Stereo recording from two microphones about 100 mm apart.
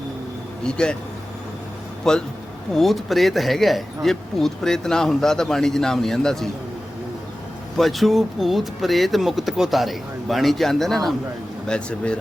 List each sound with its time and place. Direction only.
0.6 s speech: 10° left (ahead or behind)
2.7 s speech: centre (ahead or behind)
7.8 s speech: centre (ahead or behind)